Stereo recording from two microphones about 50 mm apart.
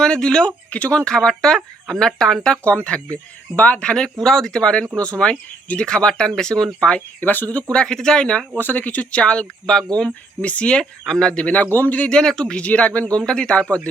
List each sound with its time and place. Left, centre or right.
0.0 s speech: centre
0.7 s speech: left
1.0 s speech: centre
2.6 s speech: left
7.2 s speech: left
7.5 s speech: centre
8.5 s speech: left
11.6 s speech: left
12.0 s speech: centre